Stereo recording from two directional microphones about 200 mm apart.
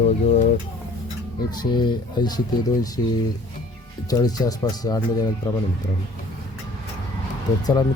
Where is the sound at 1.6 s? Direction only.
20° left (ahead or behind).